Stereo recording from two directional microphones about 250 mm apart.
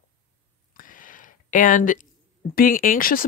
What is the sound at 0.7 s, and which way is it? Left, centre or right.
Speech, left.